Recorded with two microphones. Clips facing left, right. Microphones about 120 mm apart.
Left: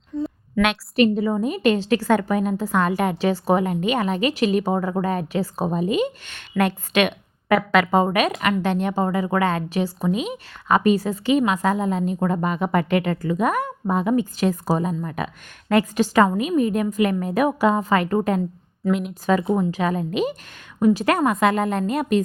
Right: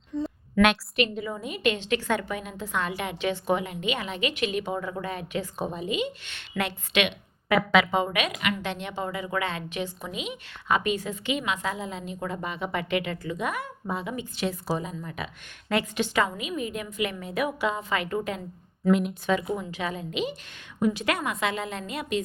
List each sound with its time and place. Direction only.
0.2 s a sound: centre (ahead or behind)
0.9 s a woman's voice: 35° left (ahead or behind)
7.6 s speech: centre (ahead or behind)
7.9 s a woman's voice: 45° left (ahead or behind)
18.9 s speech: centre (ahead or behind)
19.2 s a woman's voice: 40° left (ahead or behind)